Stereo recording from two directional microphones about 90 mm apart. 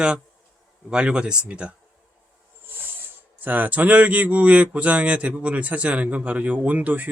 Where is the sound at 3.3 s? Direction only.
20° right (ahead or behind).